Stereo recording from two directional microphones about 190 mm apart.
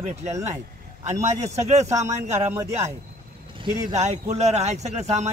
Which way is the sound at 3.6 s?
35° right (ahead or behind).